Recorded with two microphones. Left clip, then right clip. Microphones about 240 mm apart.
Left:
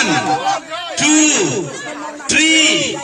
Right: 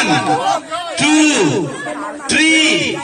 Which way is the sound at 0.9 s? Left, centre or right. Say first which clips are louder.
Right 1 dB; left.